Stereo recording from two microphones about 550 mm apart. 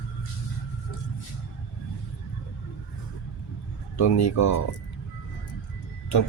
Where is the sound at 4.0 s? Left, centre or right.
Left.